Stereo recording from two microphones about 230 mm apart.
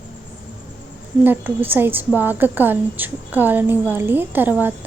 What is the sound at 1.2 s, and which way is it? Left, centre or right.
A woman's voice, centre.